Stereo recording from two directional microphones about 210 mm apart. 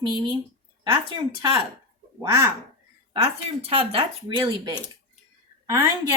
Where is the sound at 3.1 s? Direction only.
30° right (ahead or behind).